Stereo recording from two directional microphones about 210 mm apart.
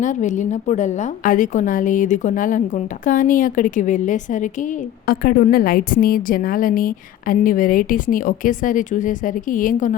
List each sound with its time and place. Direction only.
0.0 s a woman's voice: 35° left (ahead or behind)